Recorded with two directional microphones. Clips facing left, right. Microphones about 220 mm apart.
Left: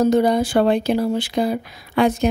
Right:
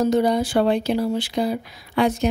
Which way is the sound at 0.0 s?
50° left (ahead or behind).